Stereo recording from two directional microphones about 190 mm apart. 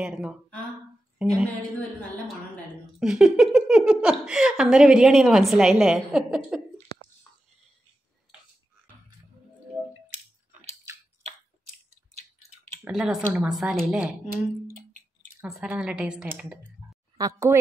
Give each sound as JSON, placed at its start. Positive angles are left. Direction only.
{"t": 0.0, "sound": "a woman's voice", "side_deg": -5}
{"t": 3.0, "sound": "speech", "side_deg": -5}
{"t": 10.1, "sound": "coin", "side_deg": -35}
{"t": 12.8, "sound": "speech", "side_deg": -5}
{"t": 14.7, "sound": "a sound", "side_deg": -40}
{"t": 15.4, "sound": "speech", "side_deg": -5}